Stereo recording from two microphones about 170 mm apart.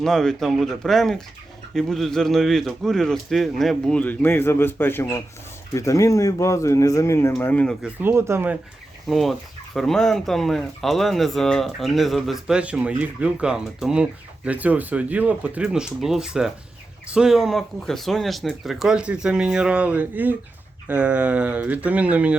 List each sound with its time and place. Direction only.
0.0 s speech: 5° left (ahead or behind)
7.8 s speech: 10° right (ahead or behind)
9.0 s speech: centre (ahead or behind)